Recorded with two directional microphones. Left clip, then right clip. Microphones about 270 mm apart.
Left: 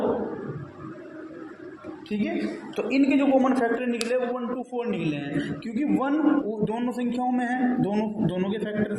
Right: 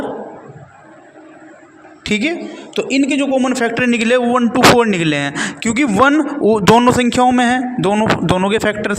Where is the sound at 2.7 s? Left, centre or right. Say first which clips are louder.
Right 7 dB; right.